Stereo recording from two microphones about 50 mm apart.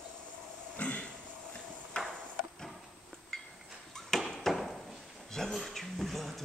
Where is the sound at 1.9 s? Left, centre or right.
Centre.